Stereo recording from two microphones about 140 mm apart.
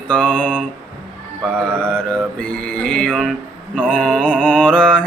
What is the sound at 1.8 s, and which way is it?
Mantra, 5° left (ahead or behind).